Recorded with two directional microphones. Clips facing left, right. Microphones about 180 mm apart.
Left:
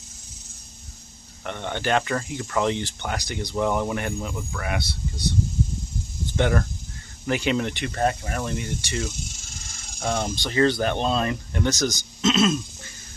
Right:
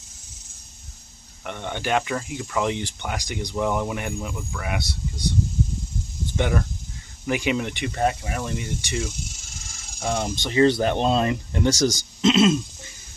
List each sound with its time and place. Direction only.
1.4 s speech: 10° right (ahead or behind)
3.5 s speech: 5° right (ahead or behind)
6.3 s speech: 10° right (ahead or behind)
10.3 s speech: 20° right (ahead or behind)